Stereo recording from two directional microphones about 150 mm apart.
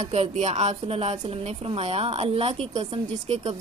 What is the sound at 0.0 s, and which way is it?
A woman's voice, 40° right (ahead or behind).